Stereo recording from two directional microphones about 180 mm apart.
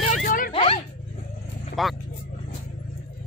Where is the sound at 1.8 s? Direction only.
Centre (ahead or behind).